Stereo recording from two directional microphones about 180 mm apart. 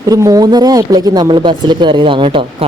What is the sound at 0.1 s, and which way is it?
Speech, 20° right (ahead or behind).